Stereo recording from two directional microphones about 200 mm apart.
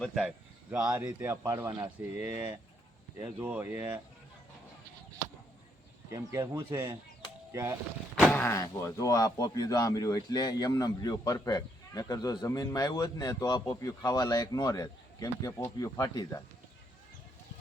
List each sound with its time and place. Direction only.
0.0 s speech: 5° right (ahead or behind)
6.1 s speech: 15° right (ahead or behind)
8.2 s speech: 5° left (ahead or behind)